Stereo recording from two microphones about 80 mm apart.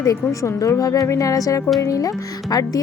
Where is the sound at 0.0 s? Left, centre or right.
Left.